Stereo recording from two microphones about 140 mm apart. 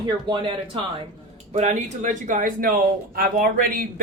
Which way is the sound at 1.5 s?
60° right (ahead or behind).